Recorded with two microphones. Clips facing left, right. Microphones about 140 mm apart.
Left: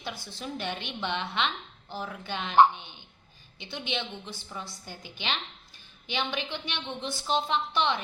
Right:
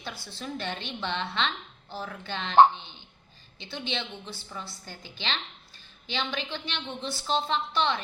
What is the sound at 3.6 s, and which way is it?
A woman's voice, 15° left (ahead or behind).